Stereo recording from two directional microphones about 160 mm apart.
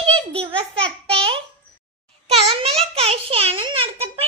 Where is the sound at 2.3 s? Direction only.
40° right (ahead or behind).